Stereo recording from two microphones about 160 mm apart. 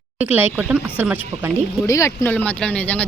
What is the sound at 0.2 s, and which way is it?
Speech, 10° right (ahead or behind).